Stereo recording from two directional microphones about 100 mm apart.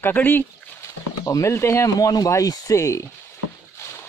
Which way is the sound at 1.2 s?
30° left (ahead or behind).